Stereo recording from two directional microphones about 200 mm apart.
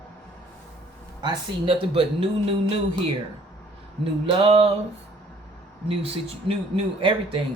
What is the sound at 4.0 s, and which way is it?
Speech, 25° right (ahead or behind).